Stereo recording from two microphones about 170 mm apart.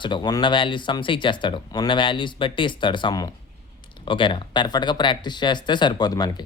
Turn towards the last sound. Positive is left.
turn(degrees=25)  # may be behind; listen again after turning